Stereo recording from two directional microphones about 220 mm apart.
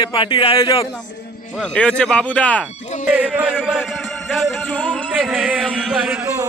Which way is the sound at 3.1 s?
5° right (ahead or behind).